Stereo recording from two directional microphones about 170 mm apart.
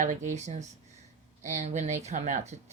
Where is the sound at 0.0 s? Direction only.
45° right (ahead or behind).